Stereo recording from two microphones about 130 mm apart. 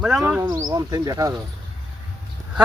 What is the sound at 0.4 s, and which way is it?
Speech, 30° right (ahead or behind).